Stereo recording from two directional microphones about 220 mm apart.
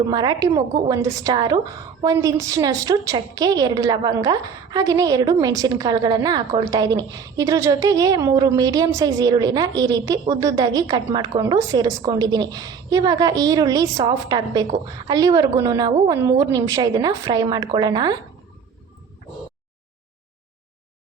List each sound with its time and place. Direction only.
0.1 s a woman's voice: 20° right (ahead or behind)